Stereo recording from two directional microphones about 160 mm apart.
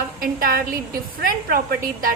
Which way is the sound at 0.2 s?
65° right (ahead or behind).